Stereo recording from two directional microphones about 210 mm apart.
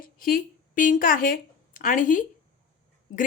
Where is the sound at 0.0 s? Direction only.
45° left (ahead or behind).